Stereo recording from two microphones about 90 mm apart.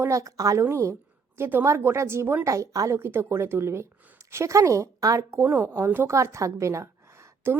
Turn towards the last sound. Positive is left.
turn(degrees=-30)  # may be behind; listen again after turning